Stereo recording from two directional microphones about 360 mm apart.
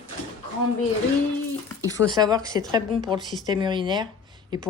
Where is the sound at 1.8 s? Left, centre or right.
Centre.